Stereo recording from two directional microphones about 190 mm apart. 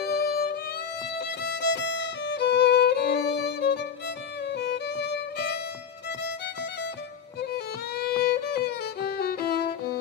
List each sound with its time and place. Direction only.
0.0 s violin: 55° left (ahead or behind)
1.2 s music: 60° left (ahead or behind)
4.4 s violin: 65° left (ahead or behind)
7.9 s violin: 55° left (ahead or behind)